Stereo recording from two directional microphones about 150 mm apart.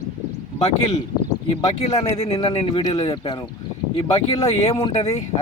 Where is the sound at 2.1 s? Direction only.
45° left (ahead or behind).